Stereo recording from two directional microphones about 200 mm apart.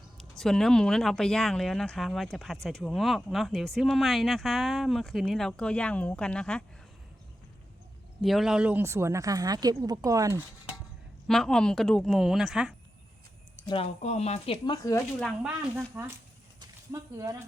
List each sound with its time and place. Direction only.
0.2 s speech: centre (ahead or behind)
8.2 s speech: centre (ahead or behind); by 10.4 s 15° right (ahead or behind)
11.3 s speech: centre (ahead or behind)
13.7 s speech: 30° left (ahead or behind)
15.2 s speech: 5° right (ahead or behind)
16.6 s a sound: 15° right (ahead or behind)